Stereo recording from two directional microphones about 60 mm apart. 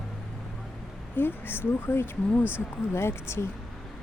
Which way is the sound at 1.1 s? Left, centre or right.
Left.